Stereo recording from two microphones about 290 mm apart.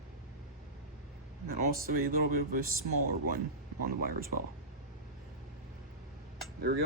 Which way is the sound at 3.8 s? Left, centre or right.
Right.